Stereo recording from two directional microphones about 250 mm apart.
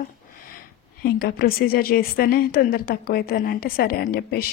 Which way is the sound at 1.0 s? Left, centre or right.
Left.